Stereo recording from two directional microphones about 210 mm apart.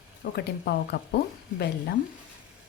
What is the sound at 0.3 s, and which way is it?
A woman's voice, 50° left (ahead or behind).